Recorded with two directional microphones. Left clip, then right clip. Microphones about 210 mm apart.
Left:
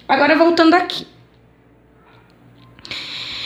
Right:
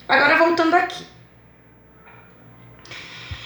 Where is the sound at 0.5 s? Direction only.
45° left (ahead or behind).